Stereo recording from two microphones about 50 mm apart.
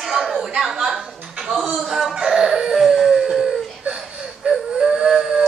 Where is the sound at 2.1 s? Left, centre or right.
Centre.